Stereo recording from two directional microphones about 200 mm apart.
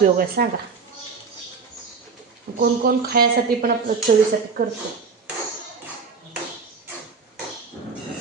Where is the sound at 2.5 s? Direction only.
50° right (ahead or behind).